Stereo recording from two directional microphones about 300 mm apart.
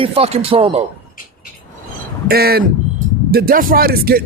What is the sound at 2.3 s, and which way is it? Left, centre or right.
Speech, right.